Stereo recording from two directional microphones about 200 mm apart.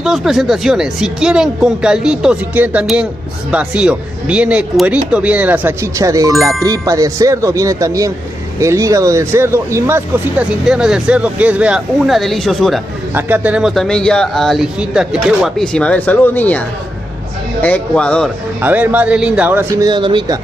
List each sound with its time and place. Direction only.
0.0 s speech: centre (ahead or behind)
18.6 s speech: 10° right (ahead or behind)
19.7 s speech: 20° right (ahead or behind)